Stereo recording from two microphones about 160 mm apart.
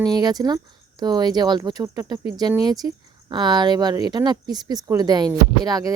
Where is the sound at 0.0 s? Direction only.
25° right (ahead or behind).